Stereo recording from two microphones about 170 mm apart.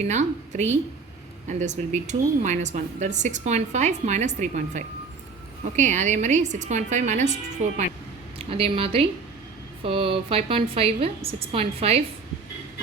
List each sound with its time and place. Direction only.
0.0 s speech: 45° right (ahead or behind)
8.4 s a woman's voice: 35° right (ahead or behind)